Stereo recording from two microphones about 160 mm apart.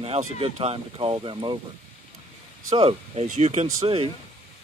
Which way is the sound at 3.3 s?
45° right (ahead or behind).